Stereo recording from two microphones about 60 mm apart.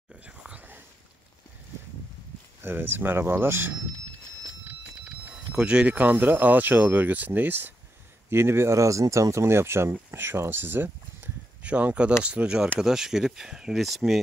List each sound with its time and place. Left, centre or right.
0.5 s a sound: right
2.6 s speech: right
5.3 s speech: centre; by 7.7 s right
8.3 s speech: right
8.7 s speech: right
11.6 s speech: right; by 14.2 s centre